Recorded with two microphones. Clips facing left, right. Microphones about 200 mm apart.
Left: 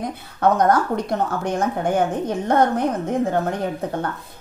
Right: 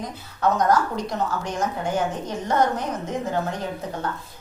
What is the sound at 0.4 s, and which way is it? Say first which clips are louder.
A woman's voice: left 3 dB; 55° left (ahead or behind).